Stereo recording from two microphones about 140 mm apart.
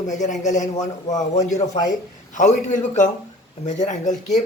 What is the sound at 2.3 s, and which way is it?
A man's voice, 60° left (ahead or behind).